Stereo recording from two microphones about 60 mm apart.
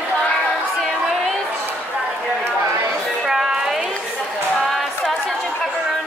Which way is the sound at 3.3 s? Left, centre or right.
Centre.